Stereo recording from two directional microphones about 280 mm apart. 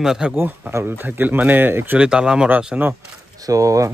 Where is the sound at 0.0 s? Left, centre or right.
Centre.